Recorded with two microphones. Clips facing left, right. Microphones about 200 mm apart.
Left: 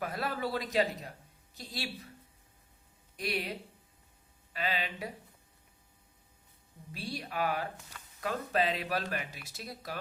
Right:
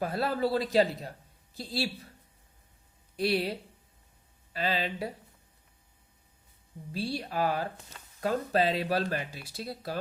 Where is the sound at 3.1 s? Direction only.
30° right (ahead or behind).